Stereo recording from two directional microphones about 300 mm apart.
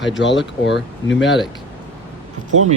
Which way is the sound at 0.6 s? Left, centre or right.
Left.